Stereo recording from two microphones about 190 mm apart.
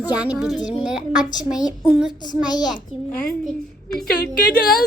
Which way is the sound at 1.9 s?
5° right (ahead or behind).